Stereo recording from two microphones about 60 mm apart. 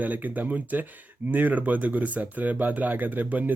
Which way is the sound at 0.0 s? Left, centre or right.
Right.